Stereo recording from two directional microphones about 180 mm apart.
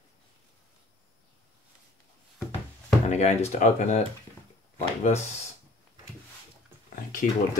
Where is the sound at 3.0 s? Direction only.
40° left (ahead or behind).